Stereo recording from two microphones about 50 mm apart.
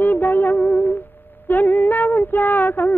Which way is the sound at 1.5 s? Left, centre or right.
Left.